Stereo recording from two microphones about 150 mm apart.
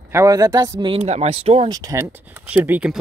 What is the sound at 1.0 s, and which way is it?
Speech, 45° right (ahead or behind).